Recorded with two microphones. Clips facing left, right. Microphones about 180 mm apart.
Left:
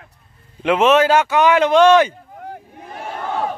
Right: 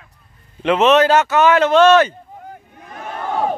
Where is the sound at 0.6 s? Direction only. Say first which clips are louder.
Right 1 dB; 10° left (ahead or behind).